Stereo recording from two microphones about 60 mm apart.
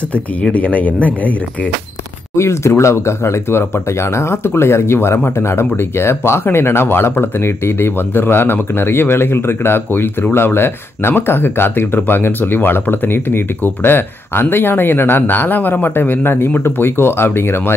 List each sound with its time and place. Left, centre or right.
0.1 s speech: left
2.3 s speech: left